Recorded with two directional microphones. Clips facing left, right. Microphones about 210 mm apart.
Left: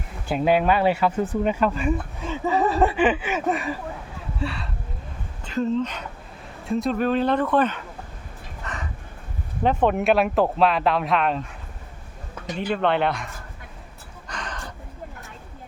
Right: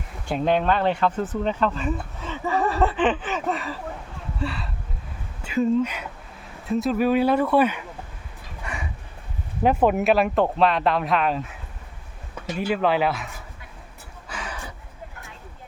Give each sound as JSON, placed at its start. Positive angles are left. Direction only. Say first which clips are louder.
{"t": 0.3, "sound": "speech", "louder": "left 2 dB", "side_deg": 5}
{"t": 4.4, "sound": "speech", "louder": "even", "side_deg": 0}
{"t": 8.6, "sound": "a sound", "louder": "right 1 dB", "side_deg": -10}
{"t": 9.6, "sound": "speech", "louder": "right 1 dB", "side_deg": -5}
{"t": 12.5, "sound": "speech", "louder": "right 1 dB", "side_deg": -5}
{"t": 14.3, "sound": "gasp", "louder": "even", "side_deg": -5}